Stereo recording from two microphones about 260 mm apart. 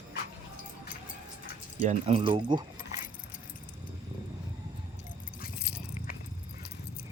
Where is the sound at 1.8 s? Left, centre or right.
Right.